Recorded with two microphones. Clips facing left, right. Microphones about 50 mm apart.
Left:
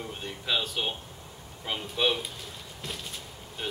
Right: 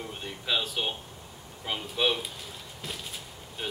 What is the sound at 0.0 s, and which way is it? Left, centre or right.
Speech, centre.